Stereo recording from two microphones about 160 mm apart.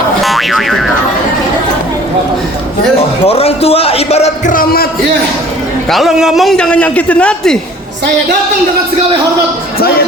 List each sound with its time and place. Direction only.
0.2 s boing: centre (ahead or behind)
3.2 s speech: 40° left (ahead or behind)
4.5 s a sound: 70° left (ahead or behind)
5.9 s a man's voice: centre (ahead or behind)